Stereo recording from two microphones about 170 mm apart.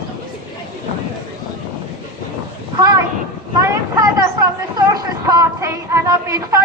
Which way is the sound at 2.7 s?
25° right (ahead or behind).